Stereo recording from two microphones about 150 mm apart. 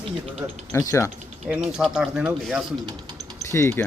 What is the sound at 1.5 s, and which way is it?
Speech, 5° right (ahead or behind).